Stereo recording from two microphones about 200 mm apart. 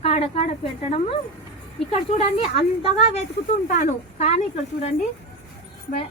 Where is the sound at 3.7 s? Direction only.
35° left (ahead or behind).